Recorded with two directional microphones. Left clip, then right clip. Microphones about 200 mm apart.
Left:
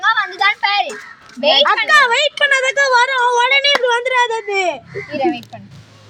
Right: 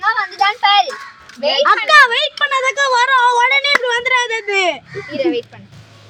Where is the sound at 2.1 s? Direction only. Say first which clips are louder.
Left 2 dB; centre (ahead or behind).